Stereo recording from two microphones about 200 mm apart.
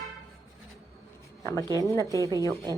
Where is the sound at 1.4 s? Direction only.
15° left (ahead or behind).